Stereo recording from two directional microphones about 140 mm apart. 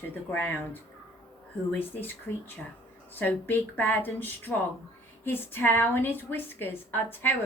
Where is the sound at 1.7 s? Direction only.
15° left (ahead or behind).